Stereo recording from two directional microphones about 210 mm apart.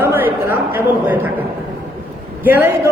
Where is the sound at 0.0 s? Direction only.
10° right (ahead or behind).